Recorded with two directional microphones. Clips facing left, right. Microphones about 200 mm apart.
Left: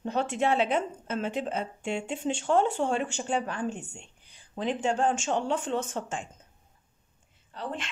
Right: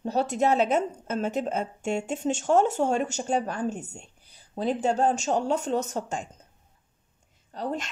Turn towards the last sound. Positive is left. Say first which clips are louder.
# right 5 dB
turn(degrees=-40)  # may be behind; listen again after turning